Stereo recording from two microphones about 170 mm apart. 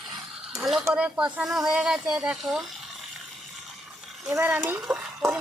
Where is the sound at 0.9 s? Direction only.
5° right (ahead or behind).